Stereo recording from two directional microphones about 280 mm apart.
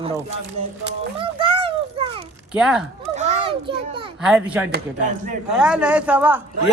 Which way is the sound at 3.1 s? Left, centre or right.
Right.